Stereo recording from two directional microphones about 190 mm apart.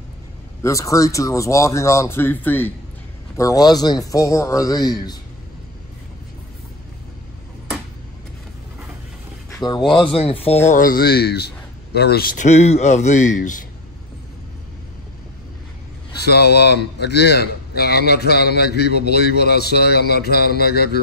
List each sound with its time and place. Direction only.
0.6 s a man's voice: 15° left (ahead or behind)
9.5 s a sound: 20° left (ahead or behind)
9.8 s a man's voice: 25° left (ahead or behind)
10.7 s speech: 45° left (ahead or behind)
12.4 s a man's voice: 35° left (ahead or behind)
16.3 s a man's voice: 60° left (ahead or behind)